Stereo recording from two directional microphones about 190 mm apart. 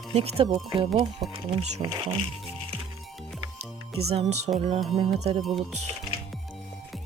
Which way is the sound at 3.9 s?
35° right (ahead or behind).